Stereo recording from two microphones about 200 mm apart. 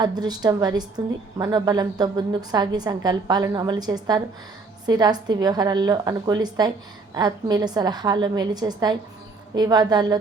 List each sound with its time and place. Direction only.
0.0 s a woman's voice: 20° right (ahead or behind)